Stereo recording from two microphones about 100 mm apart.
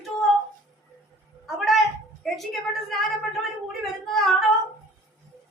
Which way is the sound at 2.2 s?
Centre (ahead or behind).